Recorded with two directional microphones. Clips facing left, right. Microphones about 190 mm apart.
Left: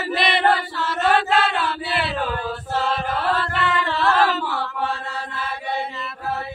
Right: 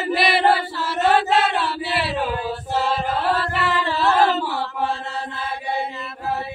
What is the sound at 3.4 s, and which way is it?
Chant, 5° right (ahead or behind).